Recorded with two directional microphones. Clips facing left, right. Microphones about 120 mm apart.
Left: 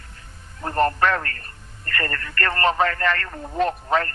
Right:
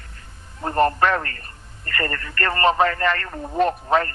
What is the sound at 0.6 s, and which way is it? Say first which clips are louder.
A man's voice: right 2 dB; 20° right (ahead or behind).